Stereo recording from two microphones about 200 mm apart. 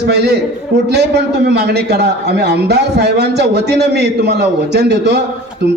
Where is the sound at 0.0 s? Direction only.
55° right (ahead or behind).